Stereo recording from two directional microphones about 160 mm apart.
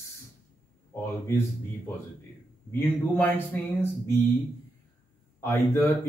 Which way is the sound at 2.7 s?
10° left (ahead or behind).